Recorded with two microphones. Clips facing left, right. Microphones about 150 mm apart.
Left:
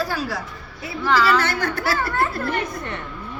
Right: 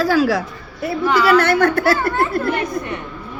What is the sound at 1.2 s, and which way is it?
A woman's voice, 55° right (ahead or behind).